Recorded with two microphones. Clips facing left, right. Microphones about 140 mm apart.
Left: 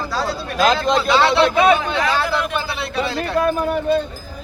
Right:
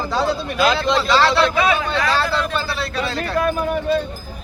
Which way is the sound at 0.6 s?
45° left (ahead or behind).